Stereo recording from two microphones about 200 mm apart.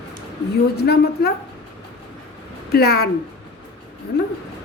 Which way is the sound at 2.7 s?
50° left (ahead or behind).